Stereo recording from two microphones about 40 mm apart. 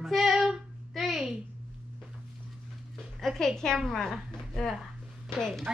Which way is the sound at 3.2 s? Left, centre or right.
Centre.